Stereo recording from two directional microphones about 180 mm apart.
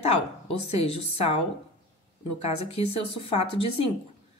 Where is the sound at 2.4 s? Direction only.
35° left (ahead or behind).